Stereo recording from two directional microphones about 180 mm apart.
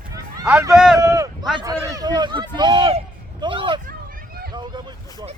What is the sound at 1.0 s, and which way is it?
A man's voice, 20° right (ahead or behind).